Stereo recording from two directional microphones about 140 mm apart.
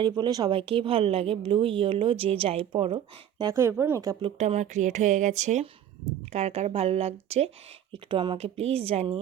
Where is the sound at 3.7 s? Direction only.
15° right (ahead or behind).